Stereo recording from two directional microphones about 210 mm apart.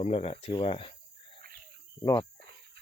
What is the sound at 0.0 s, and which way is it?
Speech, 30° left (ahead or behind).